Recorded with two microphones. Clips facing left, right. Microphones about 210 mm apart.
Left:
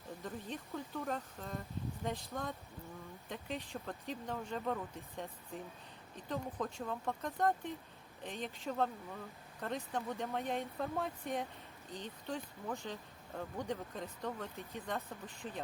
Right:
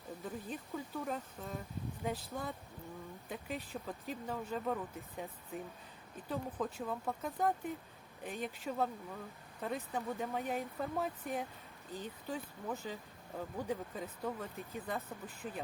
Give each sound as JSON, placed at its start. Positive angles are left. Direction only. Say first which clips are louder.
{"t": 0.2, "sound": "speech", "louder": "right 1 dB", "side_deg": 0}